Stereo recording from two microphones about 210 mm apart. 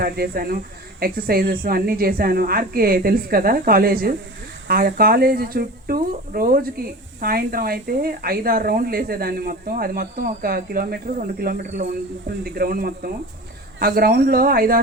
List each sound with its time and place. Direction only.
0.0 s speech: 45° right (ahead or behind)